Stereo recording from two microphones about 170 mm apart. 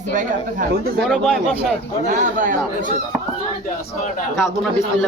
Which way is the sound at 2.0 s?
50° right (ahead or behind).